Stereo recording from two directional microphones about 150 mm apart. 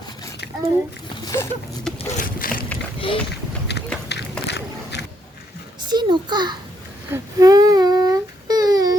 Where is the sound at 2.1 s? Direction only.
70° left (ahead or behind).